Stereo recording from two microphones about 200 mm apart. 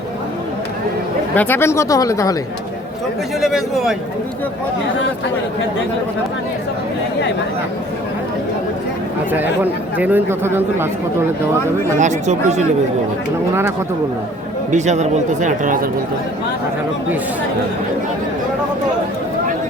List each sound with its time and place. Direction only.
1.4 s speech: 10° left (ahead or behind)
3.4 s a man's voice: centre (ahead or behind)
10.0 s speech: 10° right (ahead or behind)
11.9 s speech: 35° right (ahead or behind)
14.7 s speech: 35° right (ahead or behind)